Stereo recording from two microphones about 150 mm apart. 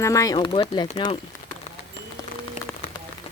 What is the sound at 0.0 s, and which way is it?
Speech, 20° left (ahead or behind).